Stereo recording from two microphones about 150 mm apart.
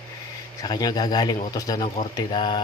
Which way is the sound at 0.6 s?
25° left (ahead or behind).